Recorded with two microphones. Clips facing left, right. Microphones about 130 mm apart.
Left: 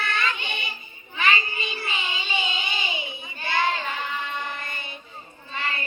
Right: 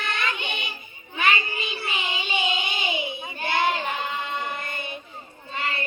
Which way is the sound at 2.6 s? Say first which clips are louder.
Right 3 dB; 65° right (ahead or behind).